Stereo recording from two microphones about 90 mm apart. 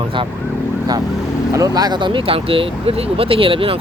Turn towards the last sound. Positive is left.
turn(degrees=-90)